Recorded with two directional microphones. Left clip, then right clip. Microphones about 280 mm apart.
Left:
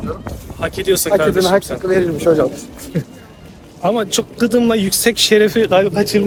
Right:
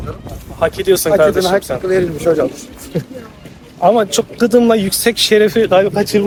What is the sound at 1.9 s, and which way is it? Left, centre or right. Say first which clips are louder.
Speech: left 1 dB; centre.